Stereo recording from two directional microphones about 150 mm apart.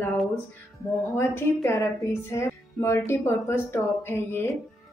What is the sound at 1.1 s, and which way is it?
A woman's voice, 15° left (ahead or behind).